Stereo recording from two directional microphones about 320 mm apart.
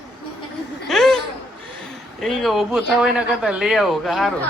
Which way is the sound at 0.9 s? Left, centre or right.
Centre.